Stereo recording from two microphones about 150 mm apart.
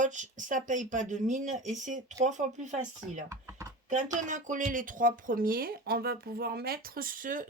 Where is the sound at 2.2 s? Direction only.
55° right (ahead or behind).